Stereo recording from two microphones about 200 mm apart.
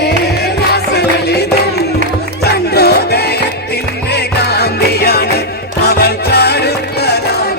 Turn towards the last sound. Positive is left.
turn(degrees=55)  # may be behind; listen again after turning